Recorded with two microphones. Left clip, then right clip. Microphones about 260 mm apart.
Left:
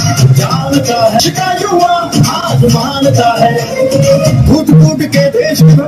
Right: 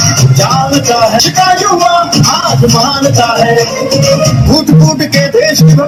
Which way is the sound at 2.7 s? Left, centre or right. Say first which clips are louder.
Right 2 dB; centre.